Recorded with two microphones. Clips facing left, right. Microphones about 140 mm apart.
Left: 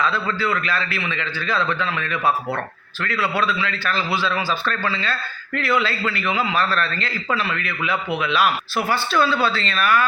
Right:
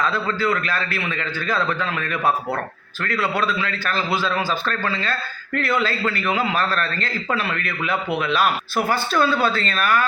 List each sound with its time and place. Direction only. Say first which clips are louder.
0.0 s a man's voice: right 1 dB; 45° right (ahead or behind)